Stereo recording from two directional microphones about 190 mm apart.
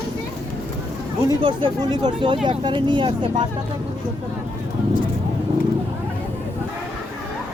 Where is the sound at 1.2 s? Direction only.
25° right (ahead or behind).